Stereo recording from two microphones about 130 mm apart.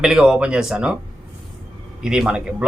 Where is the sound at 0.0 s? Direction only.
5° right (ahead or behind).